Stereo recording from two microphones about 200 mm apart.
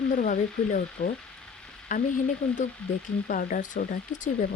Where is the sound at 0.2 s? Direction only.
40° left (ahead or behind).